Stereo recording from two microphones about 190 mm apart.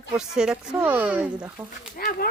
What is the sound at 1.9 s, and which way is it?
Speech, 50° left (ahead or behind).